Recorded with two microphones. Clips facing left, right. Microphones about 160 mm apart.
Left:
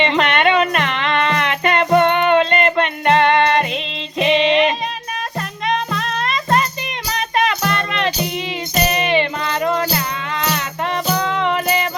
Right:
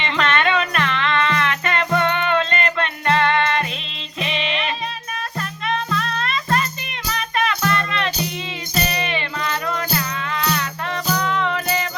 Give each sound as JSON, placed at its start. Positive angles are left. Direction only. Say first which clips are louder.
{"t": 0.0, "sound": "music", "louder": "left 4 dB", "side_deg": 20}